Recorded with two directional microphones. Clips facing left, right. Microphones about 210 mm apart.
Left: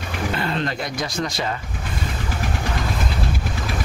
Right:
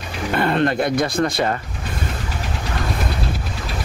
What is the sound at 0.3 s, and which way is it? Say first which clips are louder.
Speech: right 8 dB; 55° right (ahead or behind).